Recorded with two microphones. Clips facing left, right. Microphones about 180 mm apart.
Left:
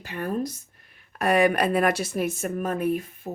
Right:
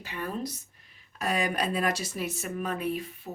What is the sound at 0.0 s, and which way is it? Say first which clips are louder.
Speech: left 6 dB; 50° left (ahead or behind).